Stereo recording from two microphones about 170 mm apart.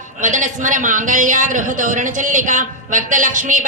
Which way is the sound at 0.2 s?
50° right (ahead or behind).